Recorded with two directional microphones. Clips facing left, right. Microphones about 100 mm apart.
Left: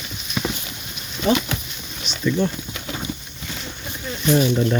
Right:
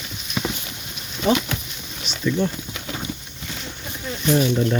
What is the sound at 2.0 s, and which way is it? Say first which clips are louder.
Boat: left 1 dB; 5° right (ahead or behind).